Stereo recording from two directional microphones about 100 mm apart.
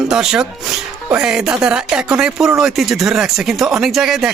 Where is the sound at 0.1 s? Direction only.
5° right (ahead or behind).